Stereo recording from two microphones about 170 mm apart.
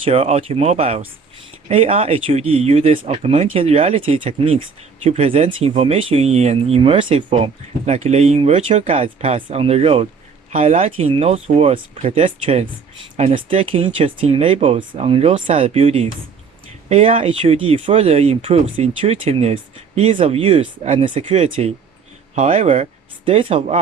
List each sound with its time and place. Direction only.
0.0 s speech: 35° right (ahead or behind)